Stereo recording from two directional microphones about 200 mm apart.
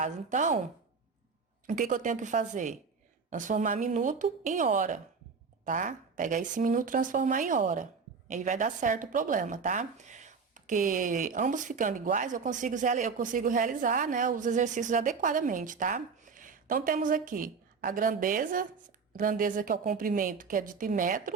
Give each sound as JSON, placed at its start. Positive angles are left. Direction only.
{"t": 0.0, "sound": "speech", "side_deg": -40}
{"t": 1.6, "sound": "a woman's voice", "side_deg": -40}